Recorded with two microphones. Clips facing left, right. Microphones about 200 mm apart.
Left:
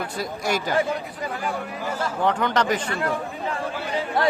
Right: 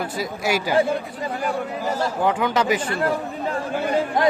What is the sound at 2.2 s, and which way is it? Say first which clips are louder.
Speech: right 1 dB; 5° right (ahead or behind).